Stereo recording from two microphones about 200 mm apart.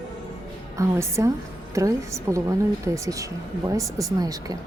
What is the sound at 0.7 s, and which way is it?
Speech, 15° right (ahead or behind).